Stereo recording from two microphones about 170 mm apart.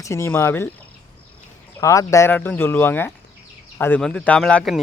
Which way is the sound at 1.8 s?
20° left (ahead or behind).